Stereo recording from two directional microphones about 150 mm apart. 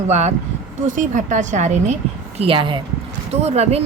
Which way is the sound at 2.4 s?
35° right (ahead or behind).